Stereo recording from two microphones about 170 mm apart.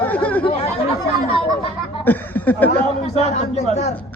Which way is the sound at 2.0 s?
10° left (ahead or behind).